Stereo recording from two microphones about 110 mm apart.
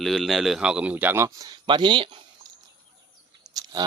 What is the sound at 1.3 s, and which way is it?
Speech, 30° right (ahead or behind).